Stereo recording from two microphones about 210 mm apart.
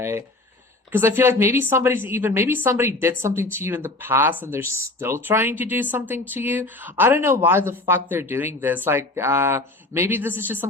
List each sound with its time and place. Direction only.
0.0 s speech: 15° right (ahead or behind)